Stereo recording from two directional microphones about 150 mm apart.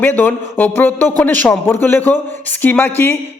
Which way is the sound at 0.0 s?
10° left (ahead or behind).